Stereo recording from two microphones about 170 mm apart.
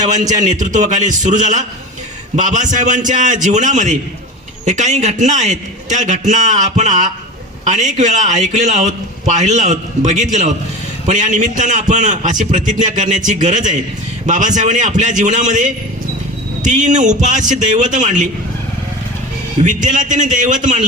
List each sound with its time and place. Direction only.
0.6 s a man's voice: 45° right (ahead or behind)
19.6 s a man's voice: 45° right (ahead or behind)